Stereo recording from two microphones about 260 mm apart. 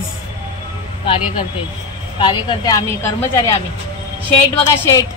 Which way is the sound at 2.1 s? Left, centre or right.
Centre.